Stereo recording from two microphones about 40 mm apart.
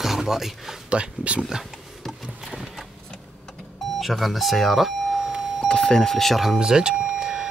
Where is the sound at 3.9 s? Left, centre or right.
Centre.